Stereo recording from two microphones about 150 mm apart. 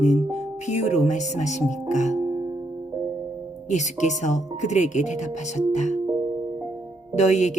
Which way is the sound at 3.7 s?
55° left (ahead or behind).